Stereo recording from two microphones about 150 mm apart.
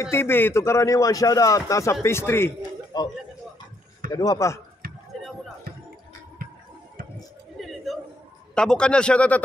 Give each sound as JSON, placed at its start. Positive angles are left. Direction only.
{"t": 0.0, "sound": "a man's voice", "side_deg": 15}
{"t": 2.9, "sound": "a man's voice", "side_deg": 25}
{"t": 7.6, "sound": "a sound", "side_deg": 0}
{"t": 8.5, "sound": "speech", "side_deg": 5}